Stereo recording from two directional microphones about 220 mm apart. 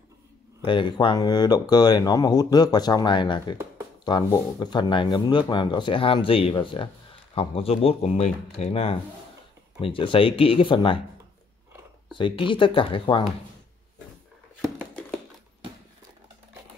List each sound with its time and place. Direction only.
0.7 s speech: 20° left (ahead or behind)
12.1 s speech: 20° left (ahead or behind)